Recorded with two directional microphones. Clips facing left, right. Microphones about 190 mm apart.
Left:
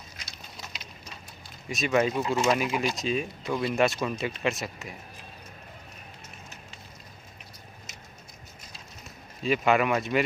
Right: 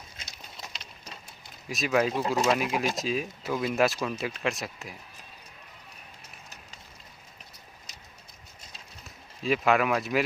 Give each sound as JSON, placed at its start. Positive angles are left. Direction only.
{"t": 0.2, "sound": "a sound", "side_deg": -25}
{"t": 1.6, "sound": "speech", "side_deg": 0}
{"t": 7.9, "sound": "vehicle", "side_deg": -35}
{"t": 9.4, "sound": "speech", "side_deg": 0}